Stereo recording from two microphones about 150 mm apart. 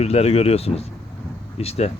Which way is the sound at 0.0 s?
45° left (ahead or behind).